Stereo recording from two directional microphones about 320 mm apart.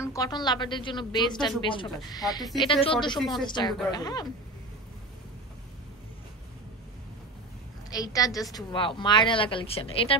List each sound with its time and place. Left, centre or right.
0.0 s a woman's voice: centre
7.9 s a woman's voice: centre